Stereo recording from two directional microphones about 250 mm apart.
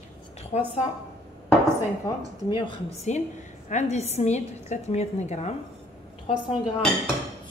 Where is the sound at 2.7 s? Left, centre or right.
Left.